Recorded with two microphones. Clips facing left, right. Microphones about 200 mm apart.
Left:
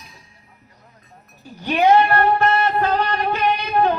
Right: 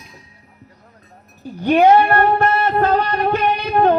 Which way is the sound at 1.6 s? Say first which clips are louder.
Right 3 dB; 55° right (ahead or behind).